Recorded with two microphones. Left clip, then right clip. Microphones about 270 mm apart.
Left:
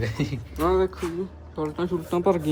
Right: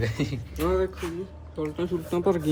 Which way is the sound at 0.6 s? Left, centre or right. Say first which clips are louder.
Left 3 dB; left.